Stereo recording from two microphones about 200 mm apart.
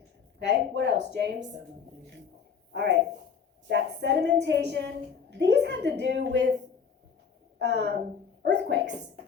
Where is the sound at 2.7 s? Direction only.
60° right (ahead or behind).